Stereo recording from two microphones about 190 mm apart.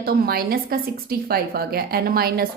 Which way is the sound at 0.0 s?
50° right (ahead or behind).